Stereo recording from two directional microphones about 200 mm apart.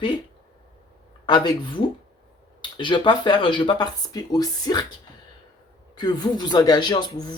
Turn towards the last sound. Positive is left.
turn(degrees=20)  # may be behind; listen again after turning